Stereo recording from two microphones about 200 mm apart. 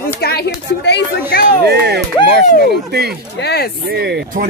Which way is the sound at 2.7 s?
55° right (ahead or behind).